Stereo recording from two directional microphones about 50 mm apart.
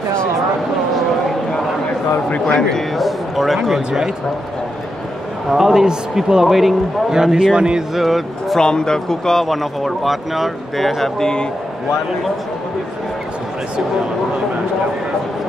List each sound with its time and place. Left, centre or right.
2.2 s a man's voice: left
3.0 s speech: centre
5.5 s a man's voice: centre
7.9 s speech: centre
8.5 s speech: centre